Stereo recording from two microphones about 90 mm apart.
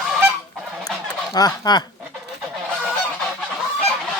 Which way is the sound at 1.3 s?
45° left (ahead or behind).